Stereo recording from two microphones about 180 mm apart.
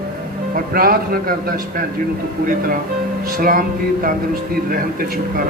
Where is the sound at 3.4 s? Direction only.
50° right (ahead or behind).